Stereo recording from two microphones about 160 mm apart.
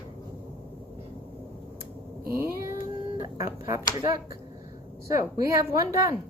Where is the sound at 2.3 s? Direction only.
15° right (ahead or behind).